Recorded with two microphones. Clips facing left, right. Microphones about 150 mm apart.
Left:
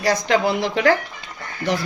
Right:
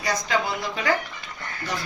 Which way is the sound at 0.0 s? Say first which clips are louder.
Left 7 dB; 70° left (ahead or behind).